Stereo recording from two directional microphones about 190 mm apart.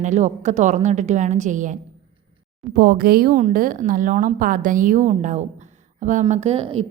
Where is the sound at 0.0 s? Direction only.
40° right (ahead or behind).